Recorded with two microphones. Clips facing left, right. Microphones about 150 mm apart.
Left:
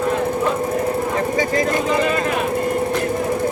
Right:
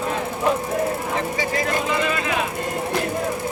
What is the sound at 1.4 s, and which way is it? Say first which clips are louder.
Vehicle: left 5 dB; 45° left (ahead or behind).